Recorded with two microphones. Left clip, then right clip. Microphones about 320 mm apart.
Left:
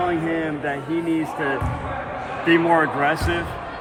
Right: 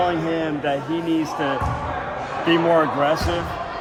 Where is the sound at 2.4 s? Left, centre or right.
Centre.